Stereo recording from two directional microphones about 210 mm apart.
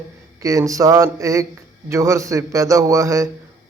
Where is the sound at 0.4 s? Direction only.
15° right (ahead or behind).